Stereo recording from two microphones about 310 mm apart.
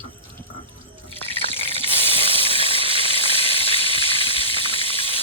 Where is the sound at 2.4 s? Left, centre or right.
Centre.